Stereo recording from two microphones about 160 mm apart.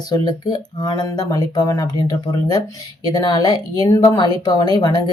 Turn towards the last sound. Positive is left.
turn(degrees=25)  # may be behind; listen again after turning